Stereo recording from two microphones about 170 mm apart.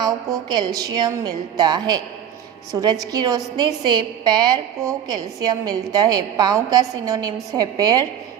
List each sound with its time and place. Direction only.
0.0 s a woman's voice: 25° right (ahead or behind)